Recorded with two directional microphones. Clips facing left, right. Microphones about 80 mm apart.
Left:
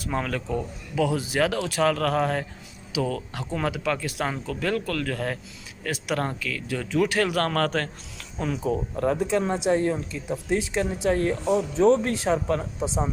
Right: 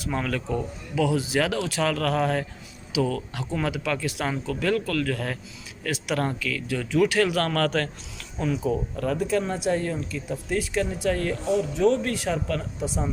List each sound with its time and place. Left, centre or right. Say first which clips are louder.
0.1 s speech: even; left
0.9 s a man's voice: even; left
8.6 s a man's voice: even; left
9.0 s speech: left 4 dB; left